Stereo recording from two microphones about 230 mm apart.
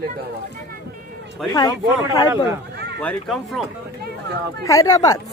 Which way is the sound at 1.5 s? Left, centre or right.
Centre.